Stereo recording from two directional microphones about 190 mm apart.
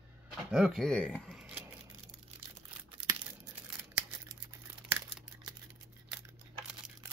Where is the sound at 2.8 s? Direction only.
25° right (ahead or behind).